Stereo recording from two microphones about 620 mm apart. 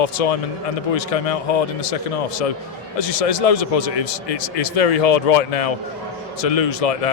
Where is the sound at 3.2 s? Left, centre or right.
Left.